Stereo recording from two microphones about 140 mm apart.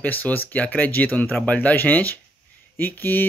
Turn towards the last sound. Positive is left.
turn(degrees=15)  # may be behind; listen again after turning